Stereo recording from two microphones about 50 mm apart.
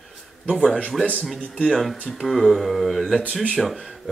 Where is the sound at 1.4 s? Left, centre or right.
Left.